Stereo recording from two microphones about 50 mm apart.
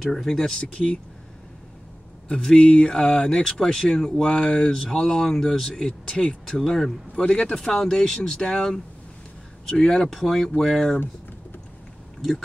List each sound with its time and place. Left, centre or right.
0.0 s speech: centre
0.4 s speech: centre
2.2 s speech: centre
7.6 s speech: centre